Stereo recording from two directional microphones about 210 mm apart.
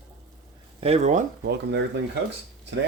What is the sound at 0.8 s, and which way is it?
Speech, 30° right (ahead or behind).